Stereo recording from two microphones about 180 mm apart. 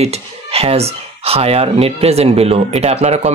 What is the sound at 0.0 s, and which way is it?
Speech, 35° right (ahead or behind).